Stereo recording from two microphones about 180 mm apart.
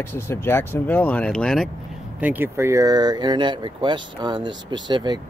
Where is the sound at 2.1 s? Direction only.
10° right (ahead or behind).